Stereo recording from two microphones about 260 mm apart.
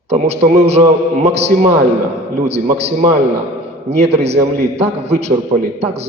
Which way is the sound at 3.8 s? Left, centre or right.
Right.